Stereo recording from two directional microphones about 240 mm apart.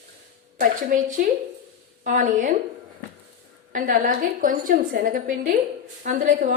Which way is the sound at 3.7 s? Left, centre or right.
Right.